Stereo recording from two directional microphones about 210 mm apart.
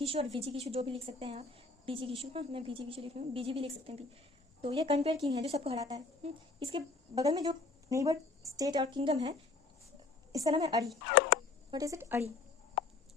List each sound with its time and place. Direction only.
0.0 s a woman's voice: 30° right (ahead or behind)
10.3 s speech: 15° right (ahead or behind)